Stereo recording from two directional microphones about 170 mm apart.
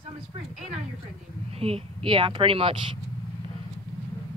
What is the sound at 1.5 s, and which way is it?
A woman's voice, 35° right (ahead or behind).